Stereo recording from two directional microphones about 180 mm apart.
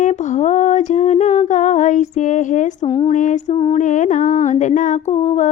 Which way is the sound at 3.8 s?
45° left (ahead or behind).